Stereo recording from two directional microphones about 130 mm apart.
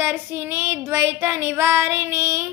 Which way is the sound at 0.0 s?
15° right (ahead or behind).